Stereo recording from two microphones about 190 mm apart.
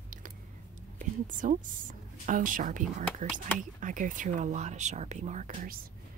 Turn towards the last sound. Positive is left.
turn(degrees=-45)  # may be behind; listen again after turning